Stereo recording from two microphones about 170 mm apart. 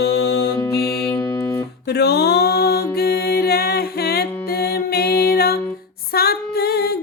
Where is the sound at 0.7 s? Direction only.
70° left (ahead or behind).